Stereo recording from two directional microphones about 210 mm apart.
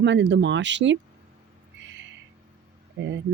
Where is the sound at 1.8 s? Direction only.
60° right (ahead or behind).